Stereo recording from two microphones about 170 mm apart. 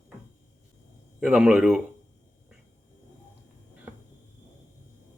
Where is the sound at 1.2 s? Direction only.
5° right (ahead or behind).